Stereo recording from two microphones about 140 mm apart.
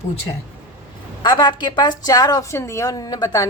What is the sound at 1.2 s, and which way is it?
A woman's voice, 35° left (ahead or behind).